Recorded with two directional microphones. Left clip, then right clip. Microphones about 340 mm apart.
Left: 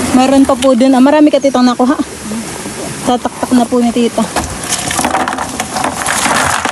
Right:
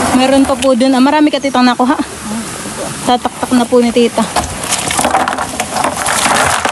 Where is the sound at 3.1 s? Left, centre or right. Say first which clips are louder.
Even; centre.